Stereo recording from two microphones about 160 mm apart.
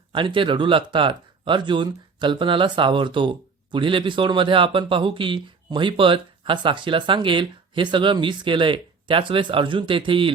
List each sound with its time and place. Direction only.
0.1 s speech: 30° right (ahead or behind)